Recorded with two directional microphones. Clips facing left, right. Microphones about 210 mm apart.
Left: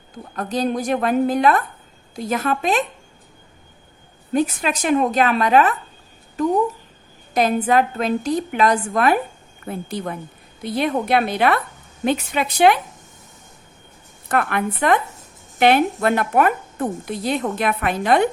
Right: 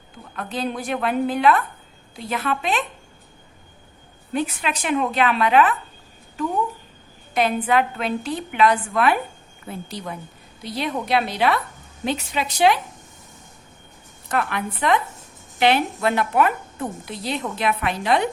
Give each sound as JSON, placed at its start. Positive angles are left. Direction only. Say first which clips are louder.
{"t": 0.3, "sound": "a woman's voice", "louder": "left 5 dB", "side_deg": 40}
{"t": 4.4, "sound": "a woman's voice", "louder": "left 5 dB", "side_deg": 40}
{"t": 9.6, "sound": "a woman's voice", "louder": "left 5 dB", "side_deg": 55}
{"t": 14.3, "sound": "a woman's voice", "louder": "left 4 dB", "side_deg": 55}